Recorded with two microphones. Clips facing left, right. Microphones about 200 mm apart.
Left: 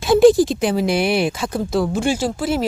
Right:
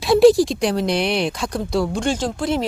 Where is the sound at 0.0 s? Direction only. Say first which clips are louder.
Left 1 dB; centre (ahead or behind).